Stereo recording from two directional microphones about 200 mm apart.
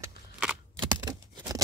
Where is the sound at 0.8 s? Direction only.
20° right (ahead or behind).